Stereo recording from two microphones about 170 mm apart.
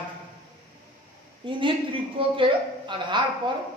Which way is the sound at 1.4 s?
30° right (ahead or behind).